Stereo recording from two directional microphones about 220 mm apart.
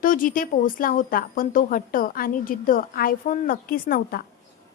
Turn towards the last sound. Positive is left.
turn(degrees=40)  # may be behind; listen again after turning